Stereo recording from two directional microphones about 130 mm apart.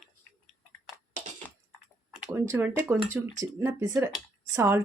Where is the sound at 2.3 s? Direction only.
15° right (ahead or behind).